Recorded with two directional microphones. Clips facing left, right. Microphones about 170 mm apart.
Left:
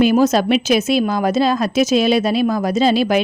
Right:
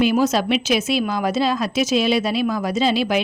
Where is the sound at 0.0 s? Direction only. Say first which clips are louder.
Left 4 dB; 45° left (ahead or behind).